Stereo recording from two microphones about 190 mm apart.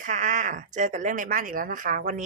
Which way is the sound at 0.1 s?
40° right (ahead or behind).